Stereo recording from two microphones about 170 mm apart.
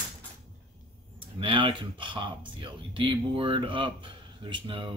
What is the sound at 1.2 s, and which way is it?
Speech, 30° right (ahead or behind).